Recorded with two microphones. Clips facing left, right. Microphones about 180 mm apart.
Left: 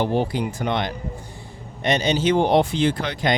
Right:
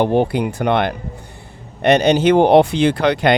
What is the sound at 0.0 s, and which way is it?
Speech, 60° right (ahead or behind).